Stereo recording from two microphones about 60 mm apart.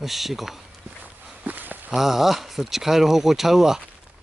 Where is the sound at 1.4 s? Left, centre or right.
Right.